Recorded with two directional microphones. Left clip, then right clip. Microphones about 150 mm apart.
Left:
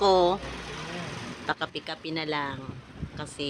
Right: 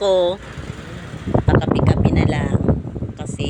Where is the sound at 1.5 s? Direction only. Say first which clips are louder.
Right 10 dB; 10° right (ahead or behind).